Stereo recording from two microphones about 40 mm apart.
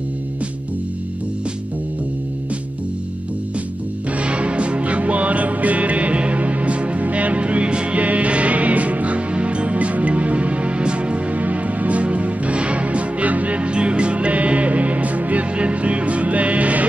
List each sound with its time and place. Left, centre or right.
4.2 s music: right